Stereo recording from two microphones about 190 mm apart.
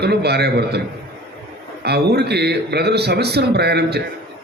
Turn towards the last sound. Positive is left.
turn(degrees=-60)  # may be behind; listen again after turning